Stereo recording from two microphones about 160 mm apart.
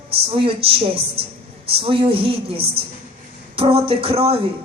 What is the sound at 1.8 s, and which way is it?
A man's voice, 35° right (ahead or behind).